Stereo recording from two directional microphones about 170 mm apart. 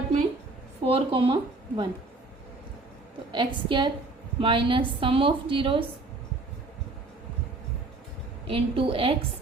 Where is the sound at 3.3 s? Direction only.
30° right (ahead or behind).